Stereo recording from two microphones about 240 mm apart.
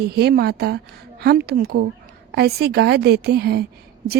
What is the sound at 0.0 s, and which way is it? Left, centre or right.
A woman's voice, right.